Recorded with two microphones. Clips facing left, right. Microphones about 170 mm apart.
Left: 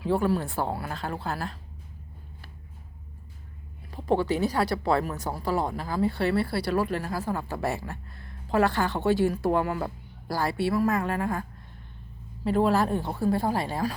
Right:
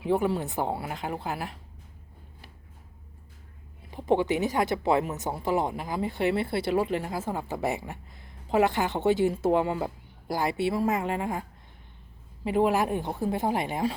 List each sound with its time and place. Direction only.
0.0 s speech: 20° right (ahead or behind)
3.9 s speech: 20° right (ahead or behind)
12.5 s speech: 15° right (ahead or behind)